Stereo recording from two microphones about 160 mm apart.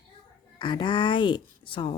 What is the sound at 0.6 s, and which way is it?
A woman's voice, 30° left (ahead or behind).